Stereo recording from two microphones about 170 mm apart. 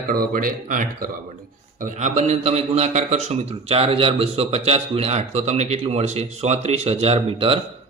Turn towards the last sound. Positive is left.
turn(degrees=-35)  # may be behind; listen again after turning